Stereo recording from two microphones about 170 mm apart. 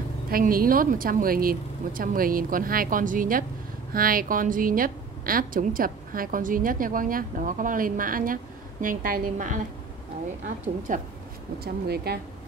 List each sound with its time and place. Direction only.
0.3 s a woman's voice: 60° right (ahead or behind)
10.9 s a woman's voice: 50° right (ahead or behind)
11.6 s speech: 70° right (ahead or behind)